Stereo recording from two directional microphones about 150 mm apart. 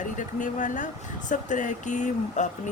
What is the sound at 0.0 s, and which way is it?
Speech, 60° left (ahead or behind).